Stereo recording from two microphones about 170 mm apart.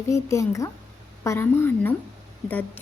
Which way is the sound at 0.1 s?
15° left (ahead or behind).